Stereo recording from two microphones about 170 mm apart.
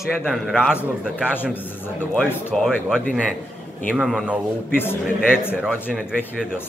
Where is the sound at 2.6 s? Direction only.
Centre (ahead or behind).